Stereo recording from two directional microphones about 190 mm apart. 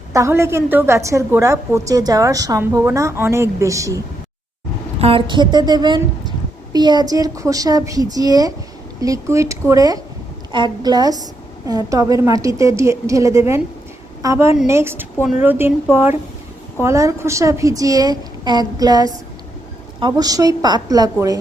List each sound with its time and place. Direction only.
0.1 s a woman's voice: 15° right (ahead or behind)
4.9 s a woman's voice: 30° right (ahead or behind)